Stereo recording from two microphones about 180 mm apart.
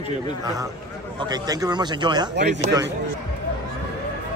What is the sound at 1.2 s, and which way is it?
A man's voice, 20° right (ahead or behind).